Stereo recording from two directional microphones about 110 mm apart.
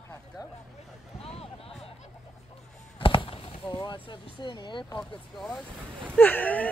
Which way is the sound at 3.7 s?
45° left (ahead or behind).